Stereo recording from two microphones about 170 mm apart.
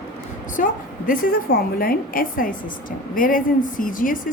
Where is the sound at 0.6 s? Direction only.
50° left (ahead or behind).